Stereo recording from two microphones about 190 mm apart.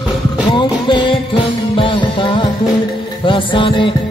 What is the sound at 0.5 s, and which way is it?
Music, 25° left (ahead or behind).